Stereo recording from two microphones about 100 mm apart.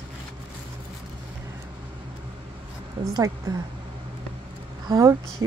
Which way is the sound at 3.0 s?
60° right (ahead or behind).